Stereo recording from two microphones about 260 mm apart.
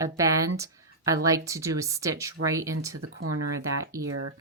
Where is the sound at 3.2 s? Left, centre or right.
Right.